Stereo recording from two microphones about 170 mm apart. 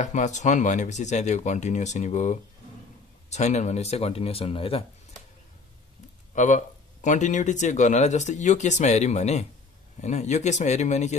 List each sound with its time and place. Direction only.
0.0 s speech: 45° left (ahead or behind)
6.3 s speech: 45° left (ahead or behind)